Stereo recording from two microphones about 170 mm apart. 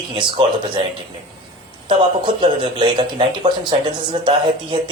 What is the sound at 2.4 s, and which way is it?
Speech, 30° right (ahead or behind).